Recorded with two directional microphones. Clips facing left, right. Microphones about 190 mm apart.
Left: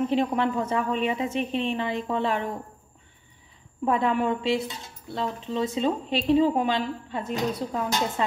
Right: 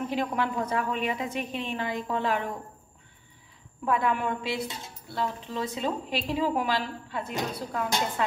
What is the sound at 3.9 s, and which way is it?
A woman's voice, 25° left (ahead or behind).